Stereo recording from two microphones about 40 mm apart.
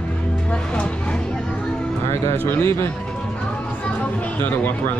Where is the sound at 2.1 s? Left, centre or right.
Left.